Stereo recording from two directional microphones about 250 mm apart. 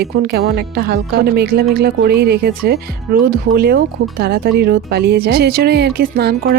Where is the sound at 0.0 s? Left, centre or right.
Right.